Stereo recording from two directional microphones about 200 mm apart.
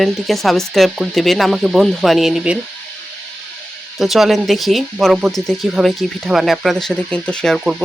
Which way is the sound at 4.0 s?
Centre (ahead or behind).